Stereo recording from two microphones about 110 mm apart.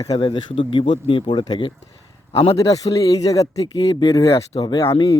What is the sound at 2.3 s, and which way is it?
Speech, 60° left (ahead or behind).